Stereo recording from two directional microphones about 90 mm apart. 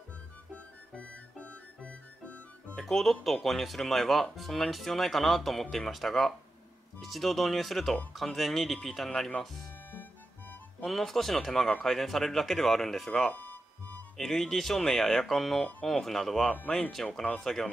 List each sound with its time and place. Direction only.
0.9 s music: 15° left (ahead or behind)
2.8 s speech: centre (ahead or behind)
10.8 s speech: 5° left (ahead or behind)
13.3 s music: 20° left (ahead or behind)
14.1 s speech: 5° left (ahead or behind)